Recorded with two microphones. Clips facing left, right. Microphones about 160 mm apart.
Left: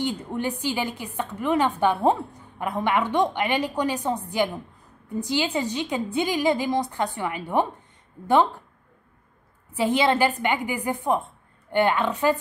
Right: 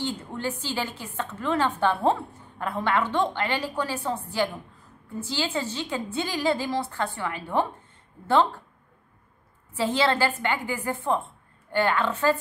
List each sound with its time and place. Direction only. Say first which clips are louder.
0.0 s a woman's voice: left 3 dB; 15° left (ahead or behind)
9.7 s a woman's voice: left 3 dB; 15° left (ahead or behind)